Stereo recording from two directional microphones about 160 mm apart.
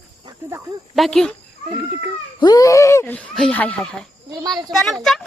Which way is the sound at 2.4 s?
25° left (ahead or behind).